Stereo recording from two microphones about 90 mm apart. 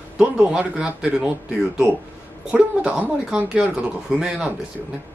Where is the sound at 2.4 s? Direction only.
10° right (ahead or behind).